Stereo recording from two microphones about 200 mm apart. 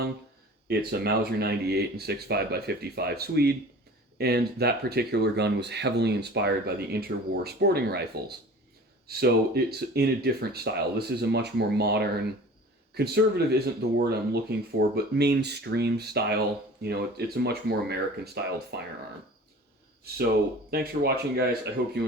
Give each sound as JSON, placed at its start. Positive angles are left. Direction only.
{"t": 0.7, "sound": "speech", "side_deg": -50}
{"t": 9.0, "sound": "speech", "side_deg": -55}
{"t": 20.7, "sound": "speech", "side_deg": -50}